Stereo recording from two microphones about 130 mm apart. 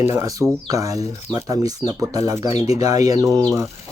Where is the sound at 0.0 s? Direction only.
25° right (ahead or behind).